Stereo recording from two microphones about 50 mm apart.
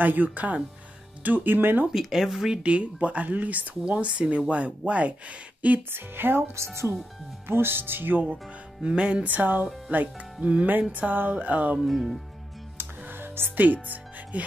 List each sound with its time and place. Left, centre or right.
0.0 s speech: right
1.9 s speech: centre
2.6 s speech: right
3.8 s speech: right
5.9 s speech: right
6.5 s speech: right
7.4 s speech: right
8.8 s speech: right
11.8 s speech: centre
12.7 s music: right